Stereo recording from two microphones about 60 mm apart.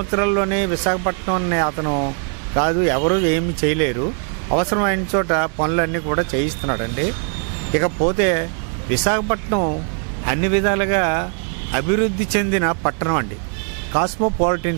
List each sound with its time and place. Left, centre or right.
0.0 s speech: right